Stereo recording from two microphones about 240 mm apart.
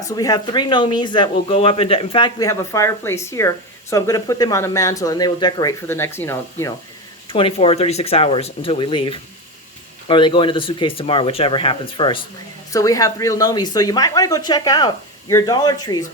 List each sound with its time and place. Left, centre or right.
0.0 s speech: centre
7.3 s speech: left